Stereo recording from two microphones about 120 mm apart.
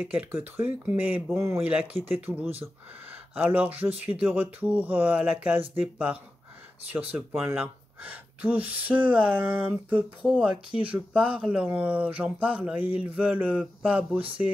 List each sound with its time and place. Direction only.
0.0 s speech: 10° right (ahead or behind)